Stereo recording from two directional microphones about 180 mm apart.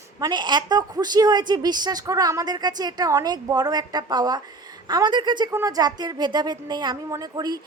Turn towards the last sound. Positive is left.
turn(degrees=-20)  # may be behind; listen again after turning